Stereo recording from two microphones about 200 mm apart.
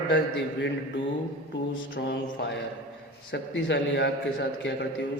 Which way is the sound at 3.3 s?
60° left (ahead or behind).